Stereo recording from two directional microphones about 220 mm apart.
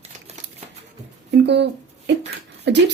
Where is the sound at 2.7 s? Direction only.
50° right (ahead or behind).